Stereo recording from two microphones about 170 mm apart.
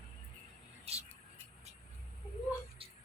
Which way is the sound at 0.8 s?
35° right (ahead or behind).